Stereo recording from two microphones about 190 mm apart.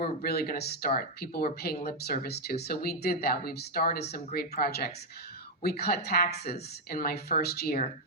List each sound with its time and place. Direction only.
0.0 s speech: 55° left (ahead or behind)